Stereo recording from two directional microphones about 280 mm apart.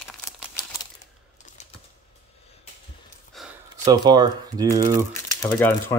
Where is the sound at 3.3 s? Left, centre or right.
Centre.